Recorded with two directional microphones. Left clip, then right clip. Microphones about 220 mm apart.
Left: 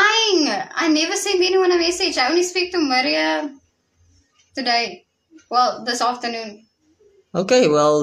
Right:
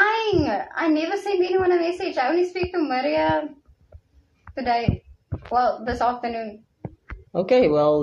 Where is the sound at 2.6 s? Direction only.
20° left (ahead or behind).